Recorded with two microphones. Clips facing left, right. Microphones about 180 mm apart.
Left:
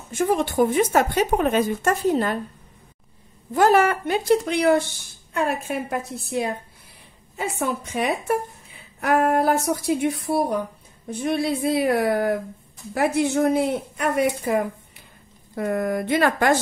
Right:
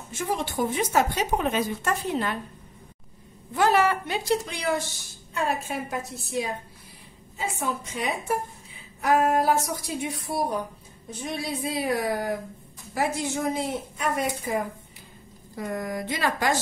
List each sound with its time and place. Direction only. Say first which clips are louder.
0.2 s speech: left 7 dB; 55° left (ahead or behind)
3.5 s a woman's voice: left 4 dB; 45° left (ahead or behind)